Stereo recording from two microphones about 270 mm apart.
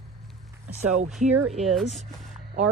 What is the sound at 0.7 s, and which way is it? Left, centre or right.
Speech, right.